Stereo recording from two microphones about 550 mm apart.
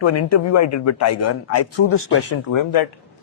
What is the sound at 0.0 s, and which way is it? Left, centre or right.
Speech, left.